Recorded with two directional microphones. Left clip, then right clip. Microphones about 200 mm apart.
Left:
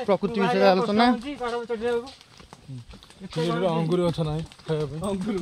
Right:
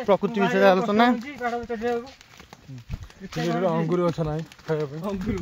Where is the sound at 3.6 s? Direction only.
5° right (ahead or behind).